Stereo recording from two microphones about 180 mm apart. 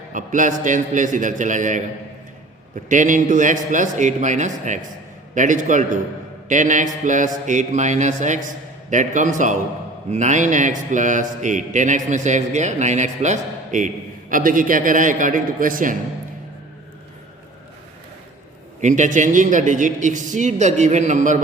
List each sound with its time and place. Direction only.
0.1 s speech: 45° right (ahead or behind)
2.9 s speech: 45° right (ahead or behind)
18.8 s speech: 45° right (ahead or behind)